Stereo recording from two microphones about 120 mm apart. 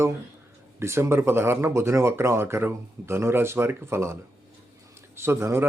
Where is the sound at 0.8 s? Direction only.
20° right (ahead or behind).